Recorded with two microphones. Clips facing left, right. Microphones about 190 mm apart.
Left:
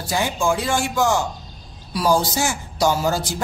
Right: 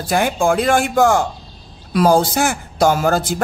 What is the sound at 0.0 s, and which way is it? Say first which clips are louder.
Speech: right 5 dB; 55° right (ahead or behind).